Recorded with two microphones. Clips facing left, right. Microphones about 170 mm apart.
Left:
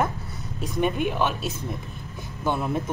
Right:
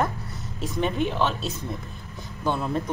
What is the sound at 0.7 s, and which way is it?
Speech, 10° left (ahead or behind).